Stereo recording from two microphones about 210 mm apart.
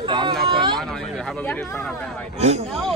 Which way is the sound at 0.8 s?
Centre (ahead or behind).